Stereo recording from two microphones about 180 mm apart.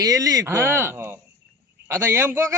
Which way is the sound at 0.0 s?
20° right (ahead or behind).